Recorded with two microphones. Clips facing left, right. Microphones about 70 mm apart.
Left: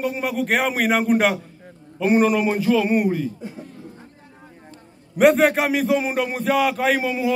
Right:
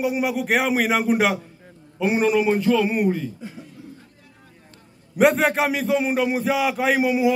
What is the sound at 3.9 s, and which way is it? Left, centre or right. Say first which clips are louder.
Vehicle: left 4 dB; left.